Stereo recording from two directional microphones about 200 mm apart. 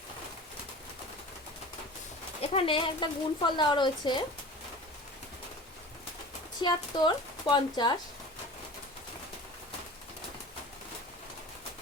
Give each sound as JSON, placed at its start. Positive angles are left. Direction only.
{"t": 2.4, "sound": "speech", "side_deg": 30}
{"t": 6.6, "sound": "speech", "side_deg": 20}